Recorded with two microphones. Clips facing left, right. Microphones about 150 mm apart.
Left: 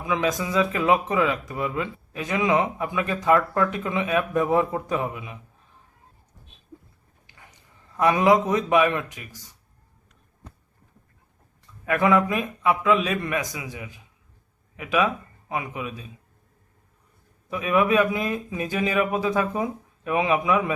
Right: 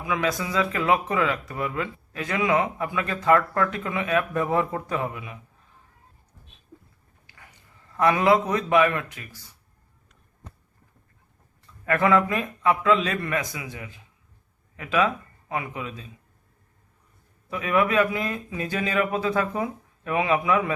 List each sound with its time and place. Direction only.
0.0 s speech: 20° left (ahead or behind)
7.3 s a man's voice: 20° left (ahead or behind)
11.9 s a man's voice: 15° left (ahead or behind)
17.5 s speech: 20° left (ahead or behind)